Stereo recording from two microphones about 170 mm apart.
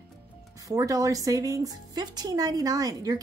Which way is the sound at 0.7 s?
20° right (ahead or behind).